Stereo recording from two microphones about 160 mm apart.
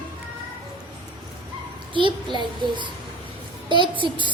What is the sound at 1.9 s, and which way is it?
A child's voice, 30° right (ahead or behind).